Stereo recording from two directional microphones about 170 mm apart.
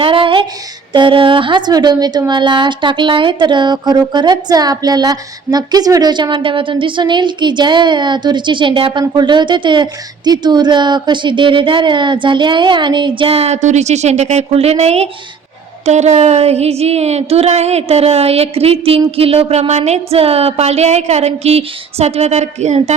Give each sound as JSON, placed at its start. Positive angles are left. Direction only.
{"t": 0.0, "sound": "child singing", "side_deg": -30}
{"t": 0.9, "sound": "a woman's voice", "side_deg": -30}
{"t": 15.9, "sound": "a sound", "side_deg": -40}